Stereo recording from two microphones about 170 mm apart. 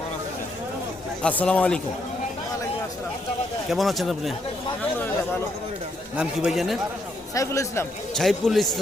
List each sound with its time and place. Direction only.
1.2 s speech: 10° left (ahead or behind)
3.7 s a man's voice: centre (ahead or behind)
6.1 s a man's voice: 5° right (ahead or behind)
7.3 s speech: 20° left (ahead or behind)
8.1 s a man's voice: centre (ahead or behind)